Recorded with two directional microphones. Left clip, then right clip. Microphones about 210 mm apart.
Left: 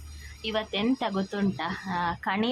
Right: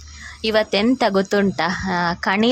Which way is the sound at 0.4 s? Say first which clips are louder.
Right 11 dB; 20° right (ahead or behind).